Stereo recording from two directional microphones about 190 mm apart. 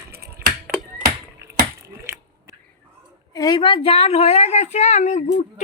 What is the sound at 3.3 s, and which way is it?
A woman's voice, 20° left (ahead or behind).